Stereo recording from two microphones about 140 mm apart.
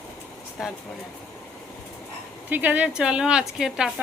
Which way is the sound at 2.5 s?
15° right (ahead or behind).